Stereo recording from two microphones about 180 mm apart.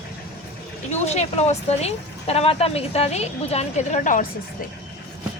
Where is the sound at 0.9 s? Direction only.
40° left (ahead or behind).